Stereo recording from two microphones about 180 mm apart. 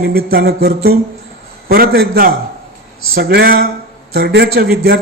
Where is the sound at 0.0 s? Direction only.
60° right (ahead or behind).